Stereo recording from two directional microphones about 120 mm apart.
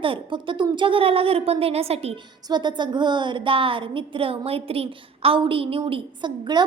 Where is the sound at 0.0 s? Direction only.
45° right (ahead or behind).